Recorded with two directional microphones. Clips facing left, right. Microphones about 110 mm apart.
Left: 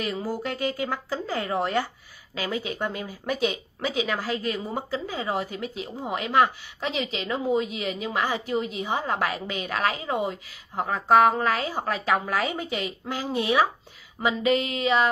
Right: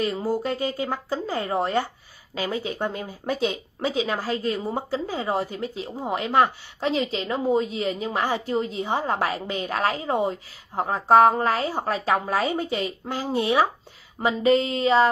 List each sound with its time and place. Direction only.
0.0 s speech: 25° right (ahead or behind)
14.4 s speech: 30° right (ahead or behind)